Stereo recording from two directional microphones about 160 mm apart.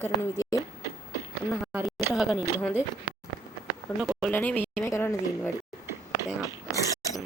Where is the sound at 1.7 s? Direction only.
15° right (ahead or behind).